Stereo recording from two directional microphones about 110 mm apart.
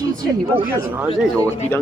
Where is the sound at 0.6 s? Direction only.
15° right (ahead or behind).